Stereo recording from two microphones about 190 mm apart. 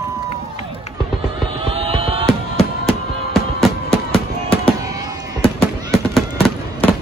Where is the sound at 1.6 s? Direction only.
30° right (ahead or behind).